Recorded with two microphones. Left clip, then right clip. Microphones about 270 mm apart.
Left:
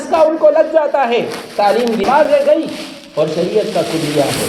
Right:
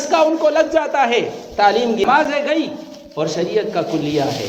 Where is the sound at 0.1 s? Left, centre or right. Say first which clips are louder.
Left 4 dB; right.